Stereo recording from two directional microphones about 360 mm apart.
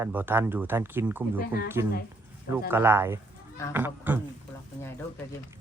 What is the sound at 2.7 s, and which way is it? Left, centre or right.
Speech, centre.